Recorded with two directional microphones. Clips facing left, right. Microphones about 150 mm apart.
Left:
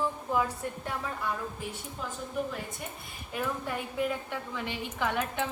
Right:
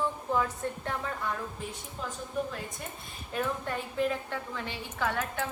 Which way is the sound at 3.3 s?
10° left (ahead or behind).